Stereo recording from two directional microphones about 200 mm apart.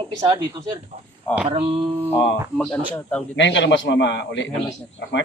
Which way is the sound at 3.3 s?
65° left (ahead or behind).